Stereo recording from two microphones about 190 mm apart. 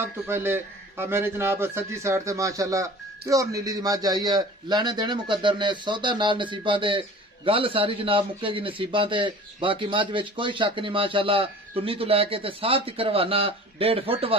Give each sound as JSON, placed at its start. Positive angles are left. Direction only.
{"t": 0.3, "sound": "a man's voice", "side_deg": -10}